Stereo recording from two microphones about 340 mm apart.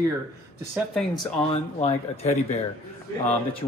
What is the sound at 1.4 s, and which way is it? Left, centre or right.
Speech, centre.